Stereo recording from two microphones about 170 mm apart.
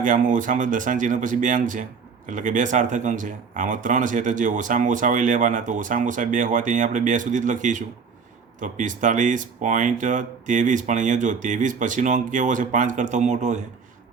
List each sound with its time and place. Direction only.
0.0 s speech: 50° right (ahead or behind)